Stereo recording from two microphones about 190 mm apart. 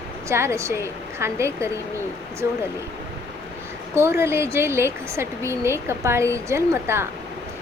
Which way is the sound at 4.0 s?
15° right (ahead or behind).